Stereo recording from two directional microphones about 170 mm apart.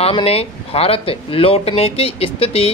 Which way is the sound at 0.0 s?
35° left (ahead or behind).